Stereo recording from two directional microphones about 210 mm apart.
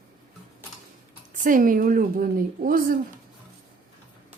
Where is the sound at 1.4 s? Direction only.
40° right (ahead or behind).